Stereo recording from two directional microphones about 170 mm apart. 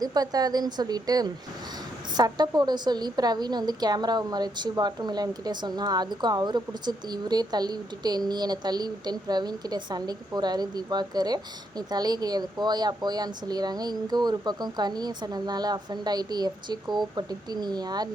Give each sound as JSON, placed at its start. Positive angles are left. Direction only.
{"t": 0.0, "sound": "a woman's voice", "side_deg": -25}